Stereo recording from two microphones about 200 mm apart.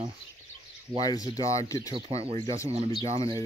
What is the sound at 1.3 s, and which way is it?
Speech, 30° right (ahead or behind).